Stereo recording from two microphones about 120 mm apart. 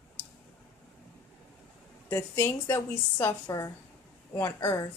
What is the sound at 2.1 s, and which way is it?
Speech, 20° left (ahead or behind).